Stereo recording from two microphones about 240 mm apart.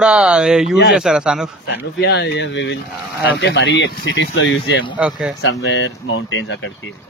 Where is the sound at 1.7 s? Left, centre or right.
Left.